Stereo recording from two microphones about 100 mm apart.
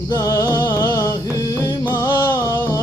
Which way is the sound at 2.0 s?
25° left (ahead or behind).